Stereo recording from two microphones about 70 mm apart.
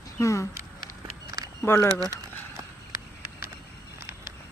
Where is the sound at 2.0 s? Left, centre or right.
Right.